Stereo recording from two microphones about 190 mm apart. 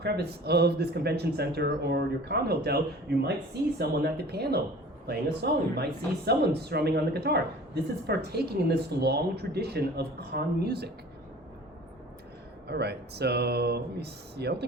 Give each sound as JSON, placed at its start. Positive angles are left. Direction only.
{"t": 0.0, "sound": "speech", "side_deg": -60}
{"t": 12.6, "sound": "speech", "side_deg": -60}